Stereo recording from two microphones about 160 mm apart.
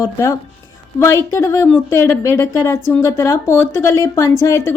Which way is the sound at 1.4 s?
20° left (ahead or behind).